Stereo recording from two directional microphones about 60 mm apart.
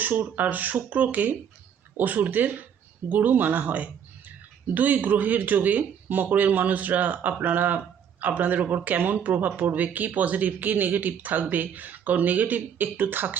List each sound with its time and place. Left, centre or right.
0.0 s speech: right